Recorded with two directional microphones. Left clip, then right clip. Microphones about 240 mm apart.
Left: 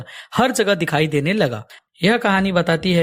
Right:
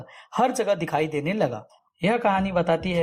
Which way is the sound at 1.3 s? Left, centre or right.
Left.